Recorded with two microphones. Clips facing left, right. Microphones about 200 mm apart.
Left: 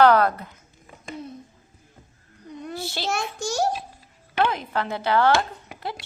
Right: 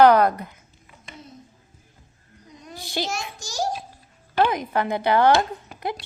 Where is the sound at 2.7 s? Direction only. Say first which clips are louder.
Right 3 dB; 15° right (ahead or behind).